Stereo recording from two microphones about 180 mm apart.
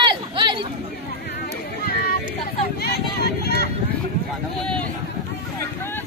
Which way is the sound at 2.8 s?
65° left (ahead or behind).